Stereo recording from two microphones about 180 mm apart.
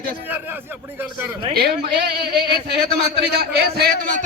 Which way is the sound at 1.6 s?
65° right (ahead or behind).